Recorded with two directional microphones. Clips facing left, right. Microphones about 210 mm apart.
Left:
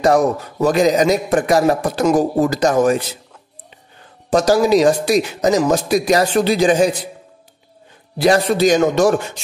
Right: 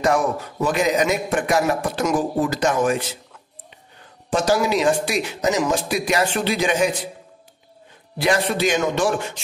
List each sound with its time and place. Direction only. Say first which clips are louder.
0.0 s a man's voice: left 5 dB; 40° left (ahead or behind)
4.3 s a man's voice: left 6 dB; 40° left (ahead or behind)
8.2 s a man's voice: left 6 dB; 40° left (ahead or behind)